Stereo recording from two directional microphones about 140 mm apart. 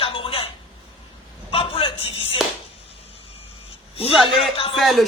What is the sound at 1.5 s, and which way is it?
Slap, 40° left (ahead or behind).